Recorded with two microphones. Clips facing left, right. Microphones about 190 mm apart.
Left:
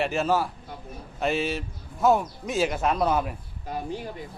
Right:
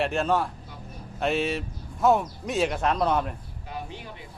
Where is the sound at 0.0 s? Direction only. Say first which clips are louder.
Even; centre (ahead or behind).